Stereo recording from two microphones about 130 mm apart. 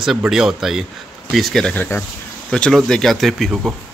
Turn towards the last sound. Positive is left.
turn(degrees=0)  # may be behind; listen again after turning